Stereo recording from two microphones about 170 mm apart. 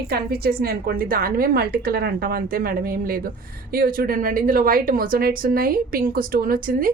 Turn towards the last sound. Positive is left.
turn(degrees=-55)  # may be behind; listen again after turning